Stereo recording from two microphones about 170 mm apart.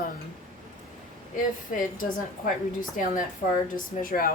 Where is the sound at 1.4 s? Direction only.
55° left (ahead or behind).